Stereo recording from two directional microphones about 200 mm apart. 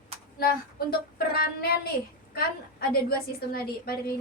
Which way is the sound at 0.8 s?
50° left (ahead or behind).